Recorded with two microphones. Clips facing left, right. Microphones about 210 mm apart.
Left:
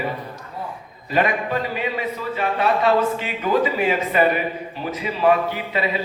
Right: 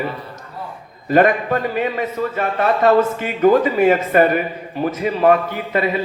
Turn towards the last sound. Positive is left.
turn(degrees=-50)  # may be behind; listen again after turning